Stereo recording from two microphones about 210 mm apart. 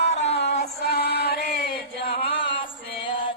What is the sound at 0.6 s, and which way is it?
Music, 50° left (ahead or behind).